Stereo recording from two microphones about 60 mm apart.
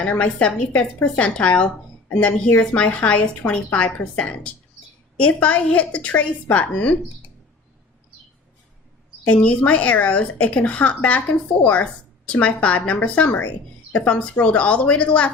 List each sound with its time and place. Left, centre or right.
0.0 s a woman's voice: left
9.3 s speech: left